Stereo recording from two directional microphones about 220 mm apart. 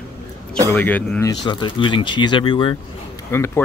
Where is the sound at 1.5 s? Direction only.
20° left (ahead or behind).